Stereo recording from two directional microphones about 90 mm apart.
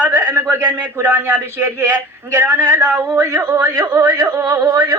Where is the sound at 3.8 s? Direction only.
35° right (ahead or behind).